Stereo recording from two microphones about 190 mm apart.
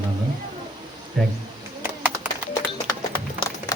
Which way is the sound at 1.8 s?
10° right (ahead or behind).